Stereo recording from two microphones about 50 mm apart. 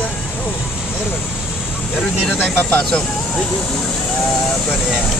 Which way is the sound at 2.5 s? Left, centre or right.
Left.